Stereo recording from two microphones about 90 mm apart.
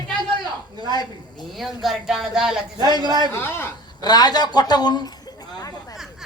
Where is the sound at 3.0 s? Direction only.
55° right (ahead or behind).